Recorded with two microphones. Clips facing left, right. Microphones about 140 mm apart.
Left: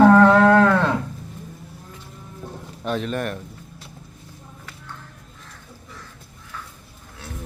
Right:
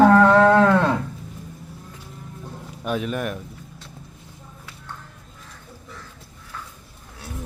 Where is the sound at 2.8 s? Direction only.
10° right (ahead or behind).